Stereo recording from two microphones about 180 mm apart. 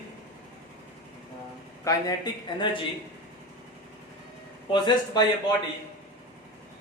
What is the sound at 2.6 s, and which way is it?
Speech, 30° left (ahead or behind).